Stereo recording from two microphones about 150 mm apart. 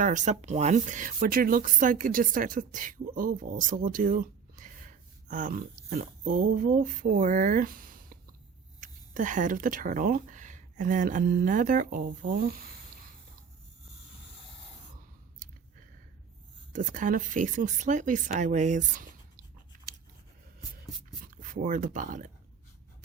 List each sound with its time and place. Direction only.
0.0 s speech: 55° right (ahead or behind)
8.8 s speech: 60° right (ahead or behind)
16.7 s speech: 60° right (ahead or behind)
21.2 s speech: 60° right (ahead or behind)